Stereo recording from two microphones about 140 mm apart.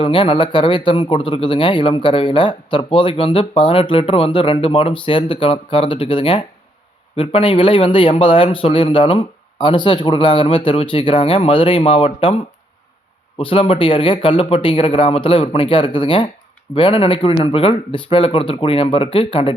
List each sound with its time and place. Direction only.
0.0 s a man's voice: 35° left (ahead or behind)
13.4 s a man's voice: 40° left (ahead or behind)